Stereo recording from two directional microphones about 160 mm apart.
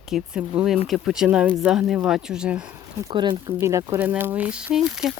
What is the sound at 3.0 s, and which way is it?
Speech, 30° right (ahead or behind).